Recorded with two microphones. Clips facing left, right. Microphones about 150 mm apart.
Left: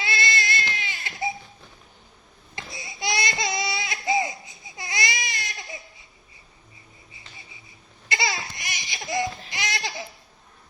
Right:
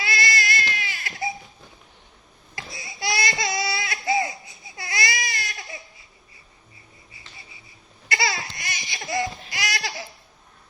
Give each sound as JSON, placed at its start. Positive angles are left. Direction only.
{"t": 0.0, "sound": "baby cry", "side_deg": 25}
{"t": 2.7, "sound": "baby cry", "side_deg": 20}
{"t": 8.0, "sound": "a sound", "side_deg": 20}
{"t": 8.9, "sound": "laughter", "side_deg": 15}